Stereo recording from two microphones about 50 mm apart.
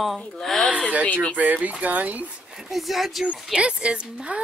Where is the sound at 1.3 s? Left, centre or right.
Right.